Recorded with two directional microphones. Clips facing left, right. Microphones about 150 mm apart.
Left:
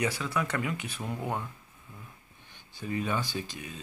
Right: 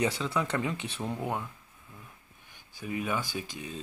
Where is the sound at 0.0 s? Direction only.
25° right (ahead or behind).